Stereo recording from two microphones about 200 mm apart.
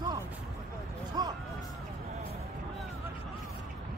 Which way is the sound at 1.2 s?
20° right (ahead or behind).